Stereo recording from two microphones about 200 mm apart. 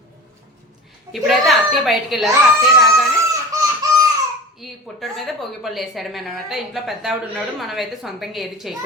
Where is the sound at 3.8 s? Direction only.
20° right (ahead or behind).